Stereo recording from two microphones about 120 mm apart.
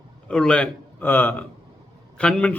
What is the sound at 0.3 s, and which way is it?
A man's voice, 5° left (ahead or behind).